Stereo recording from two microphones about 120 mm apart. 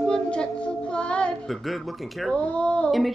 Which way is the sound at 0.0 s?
5° left (ahead or behind).